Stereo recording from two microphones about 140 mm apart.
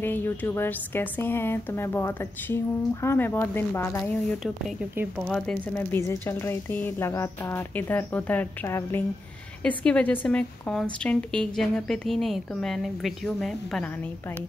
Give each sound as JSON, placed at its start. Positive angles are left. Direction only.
{"t": 0.0, "sound": "speech", "side_deg": 15}
{"t": 5.3, "sound": "a woman's voice", "side_deg": 10}